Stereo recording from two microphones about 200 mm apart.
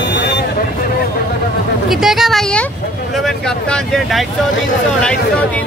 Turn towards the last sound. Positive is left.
turn(degrees=5)  # may be behind; listen again after turning